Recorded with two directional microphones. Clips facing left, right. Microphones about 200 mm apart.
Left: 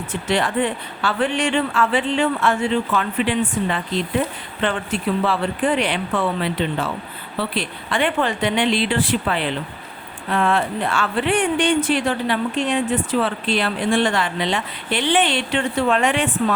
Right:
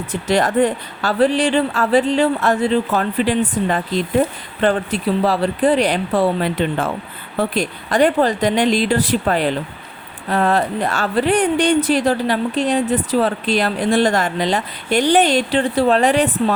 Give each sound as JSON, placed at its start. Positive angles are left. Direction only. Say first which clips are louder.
{"t": 0.1, "sound": "speech", "louder": "right 4 dB", "side_deg": -40}